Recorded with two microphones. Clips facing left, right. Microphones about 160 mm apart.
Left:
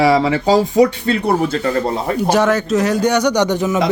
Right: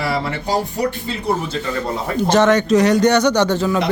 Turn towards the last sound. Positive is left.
turn(degrees=20)  # may be behind; listen again after turning